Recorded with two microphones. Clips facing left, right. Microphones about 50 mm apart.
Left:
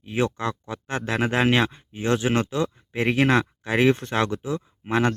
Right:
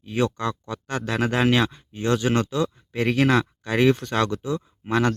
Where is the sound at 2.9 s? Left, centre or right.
Centre.